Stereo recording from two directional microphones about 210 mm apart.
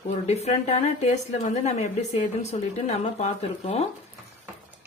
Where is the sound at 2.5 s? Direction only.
30° left (ahead or behind).